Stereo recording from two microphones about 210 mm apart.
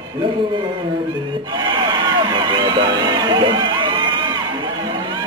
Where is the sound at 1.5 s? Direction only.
20° right (ahead or behind).